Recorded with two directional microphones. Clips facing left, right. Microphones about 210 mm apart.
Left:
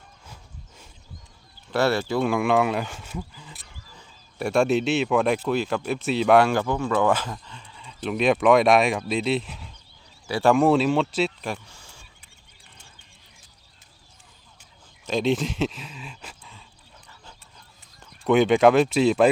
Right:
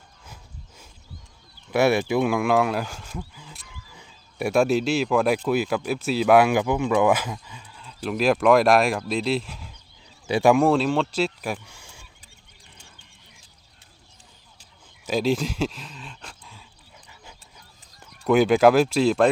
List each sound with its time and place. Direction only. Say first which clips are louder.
1.7 s speech: right 2 dB; 10° right (ahead or behind)
10.2 s speech: right 2 dB; 20° right (ahead or behind)
10.5 s speech: left 2 dB; centre (ahead or behind)
15.0 s speech: even; centre (ahead or behind)
18.3 s speech: even; centre (ahead or behind)